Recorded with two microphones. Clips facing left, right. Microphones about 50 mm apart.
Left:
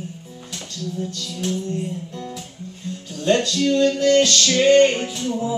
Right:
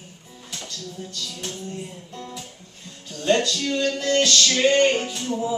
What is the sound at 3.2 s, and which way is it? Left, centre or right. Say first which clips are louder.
Music: left 3 dB; centre.